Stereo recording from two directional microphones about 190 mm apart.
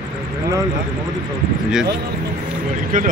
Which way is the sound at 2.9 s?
45° right (ahead or behind).